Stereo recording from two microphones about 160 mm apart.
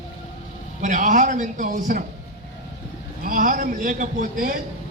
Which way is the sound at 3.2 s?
55° right (ahead or behind).